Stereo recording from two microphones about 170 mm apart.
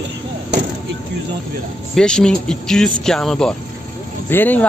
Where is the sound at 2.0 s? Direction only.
5° left (ahead or behind).